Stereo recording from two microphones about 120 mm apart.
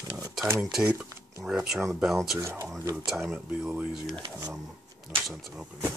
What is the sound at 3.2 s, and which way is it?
Speech, 10° right (ahead or behind).